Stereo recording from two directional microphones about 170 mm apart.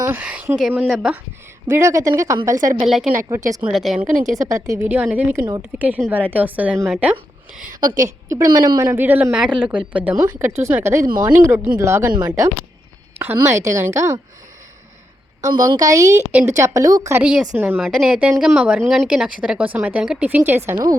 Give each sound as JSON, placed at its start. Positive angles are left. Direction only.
{"t": 0.0, "sound": "speech", "side_deg": -10}
{"t": 1.6, "sound": "speech", "side_deg": -15}
{"t": 2.8, "sound": "speech", "side_deg": 0}
{"t": 3.2, "sound": "a woman's voice", "side_deg": -20}
{"t": 3.7, "sound": "speech", "side_deg": 0}
{"t": 4.4, "sound": "a woman's voice", "side_deg": -20}
{"t": 7.8, "sound": "a woman's voice", "side_deg": -50}
{"t": 8.3, "sound": "speech", "side_deg": -20}
{"t": 15.5, "sound": "a woman's voice", "side_deg": -25}
{"t": 17.1, "sound": "speech", "side_deg": -10}